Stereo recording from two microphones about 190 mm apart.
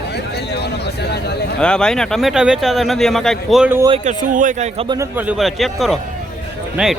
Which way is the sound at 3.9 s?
40° right (ahead or behind).